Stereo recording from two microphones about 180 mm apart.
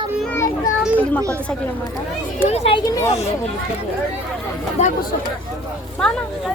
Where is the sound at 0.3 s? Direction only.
15° left (ahead or behind).